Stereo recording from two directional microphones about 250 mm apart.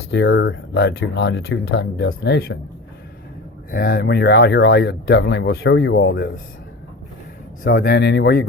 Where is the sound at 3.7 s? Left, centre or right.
Left.